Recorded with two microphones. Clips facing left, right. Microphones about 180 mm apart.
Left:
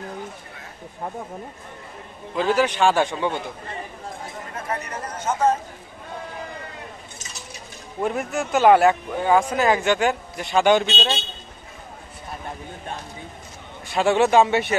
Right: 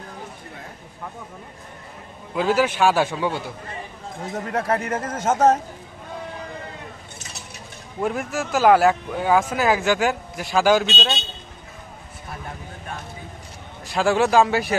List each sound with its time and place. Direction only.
2.3 s a man's voice: 10° right (ahead or behind)
4.5 s speech: 75° right (ahead or behind)
4.8 s speech: 50° right (ahead or behind)
5.1 s speech: 90° right
8.0 s speech: centre (ahead or behind)
13.8 s speech: centre (ahead or behind)